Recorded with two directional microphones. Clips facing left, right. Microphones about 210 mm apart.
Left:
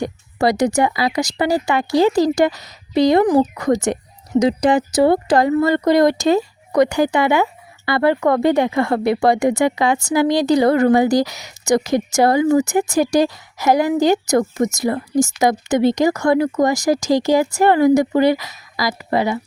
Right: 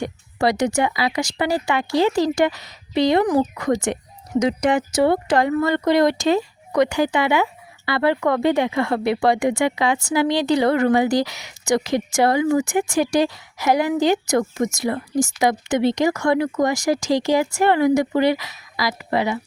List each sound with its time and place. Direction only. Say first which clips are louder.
0.0 s speech: left 3 dB; 40° left (ahead or behind)